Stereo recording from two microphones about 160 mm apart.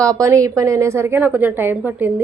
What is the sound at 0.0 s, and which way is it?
Speech, 20° right (ahead or behind).